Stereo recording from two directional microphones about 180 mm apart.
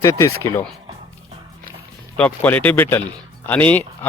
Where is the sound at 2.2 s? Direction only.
10° left (ahead or behind).